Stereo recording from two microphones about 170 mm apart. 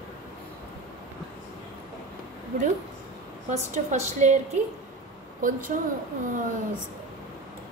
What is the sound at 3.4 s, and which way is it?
Speech, 45° right (ahead or behind).